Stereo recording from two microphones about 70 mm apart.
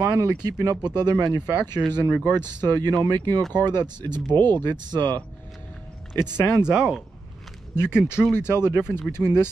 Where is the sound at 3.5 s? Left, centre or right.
Right.